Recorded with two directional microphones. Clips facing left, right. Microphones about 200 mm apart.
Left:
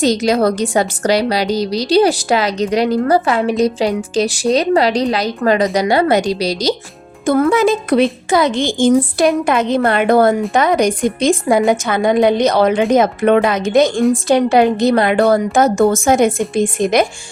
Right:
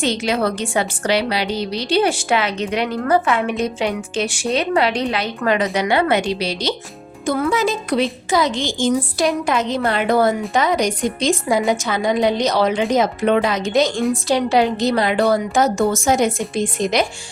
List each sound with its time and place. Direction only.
0.0 s a woman's voice: 40° left (ahead or behind)
7.3 s a woman's voice: 50° left (ahead or behind)